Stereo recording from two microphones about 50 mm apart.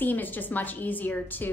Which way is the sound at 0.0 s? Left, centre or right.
Left.